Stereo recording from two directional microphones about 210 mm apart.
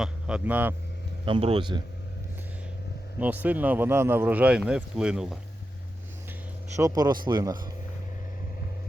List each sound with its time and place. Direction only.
0.0 s speech: 5° right (ahead or behind)
1.2 s a man's voice: 25° right (ahead or behind)
3.2 s speech: 10° right (ahead or behind)
6.7 s a man's voice: 15° right (ahead or behind)